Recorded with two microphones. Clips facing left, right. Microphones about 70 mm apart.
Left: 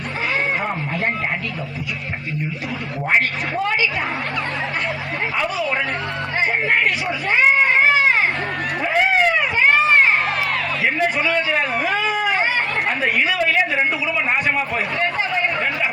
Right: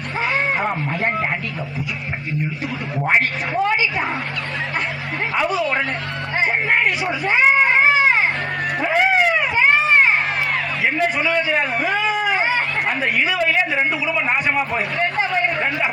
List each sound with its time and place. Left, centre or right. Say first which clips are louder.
3.0 s a man's voice: right 1 dB; centre
3.6 s a man's voice: right 2 dB; centre
5.4 s a man's voice: right 3 dB; centre
8.8 s a sound: even; centre
10.8 s a man's voice: even; centre
11.3 s a man's voice: even; centre
11.5 s a man's voice: even; centre
11.9 s a sound: even; centre
13.0 s a man's voice: even; centre